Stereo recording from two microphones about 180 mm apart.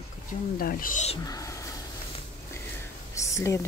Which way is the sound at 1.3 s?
20° left (ahead or behind).